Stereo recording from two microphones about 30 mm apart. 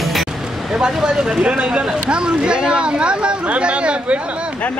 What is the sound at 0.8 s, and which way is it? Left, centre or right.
Speech, right.